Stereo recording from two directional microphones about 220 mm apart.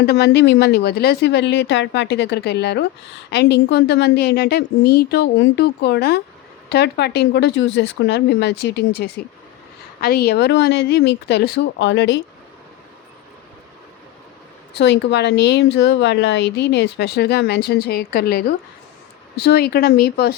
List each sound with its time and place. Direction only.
0.0 s speech: 50° left (ahead or behind)
14.8 s speech: 50° left (ahead or behind)